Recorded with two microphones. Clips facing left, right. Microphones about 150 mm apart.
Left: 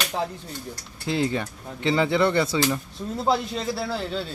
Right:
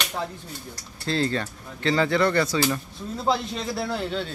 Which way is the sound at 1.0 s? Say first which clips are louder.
Even; 15° left (ahead or behind).